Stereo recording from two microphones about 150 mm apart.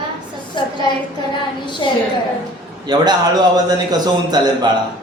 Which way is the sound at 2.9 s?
25° right (ahead or behind).